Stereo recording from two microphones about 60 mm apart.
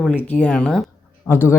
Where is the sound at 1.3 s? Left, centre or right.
Left.